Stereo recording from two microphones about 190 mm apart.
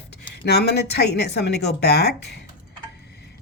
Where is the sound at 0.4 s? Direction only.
55° left (ahead or behind).